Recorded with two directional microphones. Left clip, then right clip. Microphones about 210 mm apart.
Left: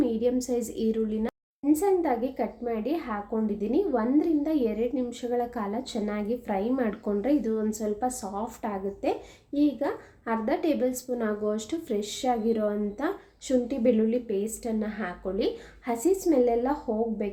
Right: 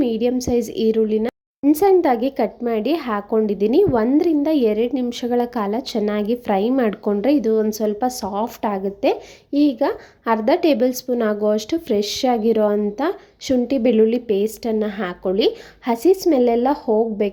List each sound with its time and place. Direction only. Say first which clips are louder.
0.0 s speech: right 6 dB; 35° right (ahead or behind)
1.7 s speech: right 9 dB; 45° right (ahead or behind)